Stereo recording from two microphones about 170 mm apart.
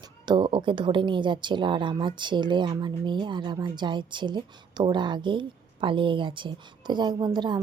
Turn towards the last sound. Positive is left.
turn(degrees=-25)  # may be behind; listen again after turning